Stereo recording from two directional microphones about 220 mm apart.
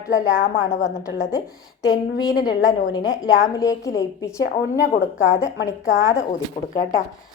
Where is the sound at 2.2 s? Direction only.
15° left (ahead or behind).